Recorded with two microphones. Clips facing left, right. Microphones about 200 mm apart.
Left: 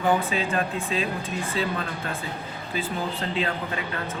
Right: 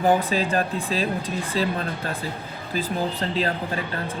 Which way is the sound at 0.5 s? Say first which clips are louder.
Right 2 dB; 35° right (ahead or behind).